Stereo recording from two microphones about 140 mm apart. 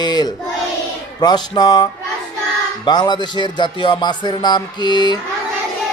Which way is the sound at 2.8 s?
30° left (ahead or behind).